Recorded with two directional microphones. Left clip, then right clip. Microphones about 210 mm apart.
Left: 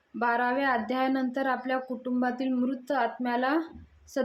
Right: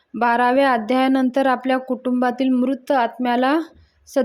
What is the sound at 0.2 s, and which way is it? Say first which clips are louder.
Speech: right 10 dB; 40° right (ahead or behind).